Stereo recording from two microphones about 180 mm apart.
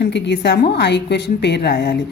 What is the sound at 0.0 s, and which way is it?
A woman's voice, 70° left (ahead or behind).